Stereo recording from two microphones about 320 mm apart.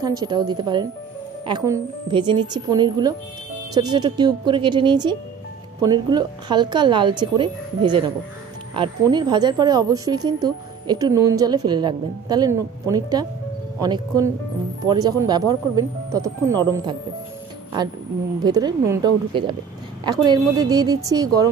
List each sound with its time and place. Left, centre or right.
0.0 s speech: centre
18.4 s speech: centre